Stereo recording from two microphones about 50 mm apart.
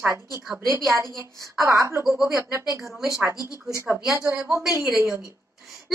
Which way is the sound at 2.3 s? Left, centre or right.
Right.